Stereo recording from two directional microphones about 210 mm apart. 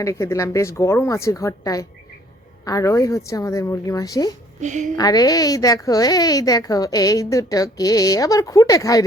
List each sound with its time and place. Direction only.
0.0 s a woman's voice: 15° left (ahead or behind)
4.6 s a woman's voice: 35° right (ahead or behind)
4.9 s a woman's voice: 20° left (ahead or behind)